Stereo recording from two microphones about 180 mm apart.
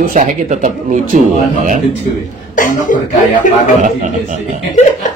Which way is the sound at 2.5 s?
45° left (ahead or behind).